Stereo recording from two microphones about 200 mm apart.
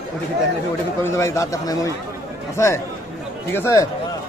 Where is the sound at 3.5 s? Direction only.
15° left (ahead or behind).